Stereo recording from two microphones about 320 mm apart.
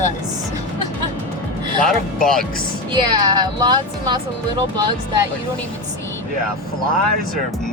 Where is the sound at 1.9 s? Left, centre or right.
Centre.